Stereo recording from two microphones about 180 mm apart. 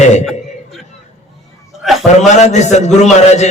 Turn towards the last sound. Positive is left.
turn(degrees=40)  # may be behind; listen again after turning